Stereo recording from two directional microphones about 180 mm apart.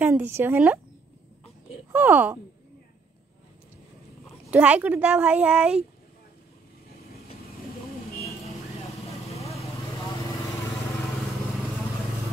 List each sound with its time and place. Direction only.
0.0 s a child's voice: 10° right (ahead or behind)
1.9 s a child's voice: 10° right (ahead or behind)
4.5 s a child's voice: 10° right (ahead or behind)
9.4 s vehicle: 15° left (ahead or behind)